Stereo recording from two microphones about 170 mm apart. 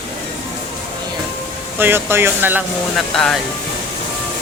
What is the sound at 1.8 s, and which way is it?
Speech, 15° right (ahead or behind).